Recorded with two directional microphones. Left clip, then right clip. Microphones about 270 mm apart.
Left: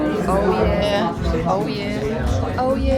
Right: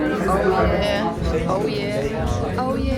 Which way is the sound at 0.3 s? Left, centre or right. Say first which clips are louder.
Even; centre.